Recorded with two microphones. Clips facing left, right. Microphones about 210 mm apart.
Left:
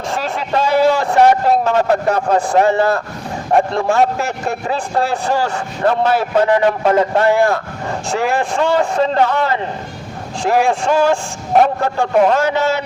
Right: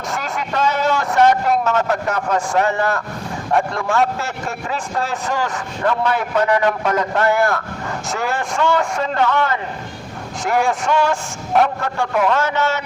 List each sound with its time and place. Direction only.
0.1 s a man's voice: 30° left (ahead or behind)